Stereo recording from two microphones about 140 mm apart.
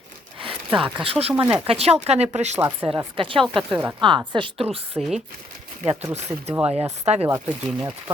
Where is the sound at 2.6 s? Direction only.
15° right (ahead or behind).